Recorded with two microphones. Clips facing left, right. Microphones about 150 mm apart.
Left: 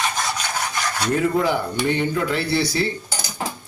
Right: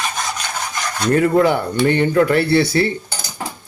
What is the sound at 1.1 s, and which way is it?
A man's voice, 65° right (ahead or behind).